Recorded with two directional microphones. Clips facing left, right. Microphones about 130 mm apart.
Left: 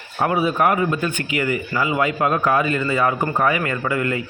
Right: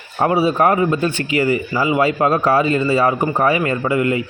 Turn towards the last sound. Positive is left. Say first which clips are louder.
# right 5 dB
turn(degrees=-25)  # may be behind; listen again after turning